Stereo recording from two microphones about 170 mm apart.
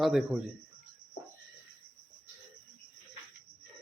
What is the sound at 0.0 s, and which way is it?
Speech, centre (ahead or behind).